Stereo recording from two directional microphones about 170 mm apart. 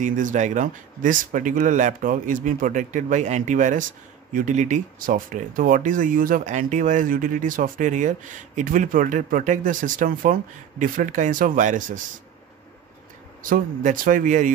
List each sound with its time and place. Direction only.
0.0 s speech: 50° right (ahead or behind)
13.4 s speech: 55° right (ahead or behind)